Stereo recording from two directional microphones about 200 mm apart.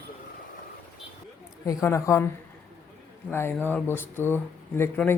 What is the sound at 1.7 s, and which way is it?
Speech, 15° left (ahead or behind).